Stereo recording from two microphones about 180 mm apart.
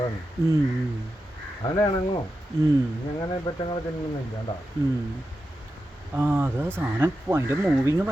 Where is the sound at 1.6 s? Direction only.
25° left (ahead or behind).